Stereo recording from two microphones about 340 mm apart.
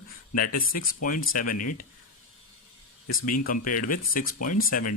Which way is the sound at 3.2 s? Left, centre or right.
Left.